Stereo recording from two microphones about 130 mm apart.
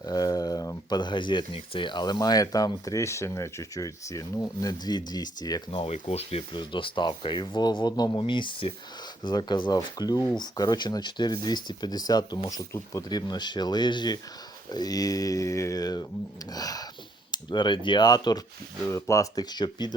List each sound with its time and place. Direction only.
0.0 s speech: 30° left (ahead or behind)
5.7 s speech: 50° left (ahead or behind)
6.5 s speech: 40° left (ahead or behind)